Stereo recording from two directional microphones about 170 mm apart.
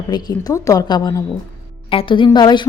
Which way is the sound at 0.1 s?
25° left (ahead or behind).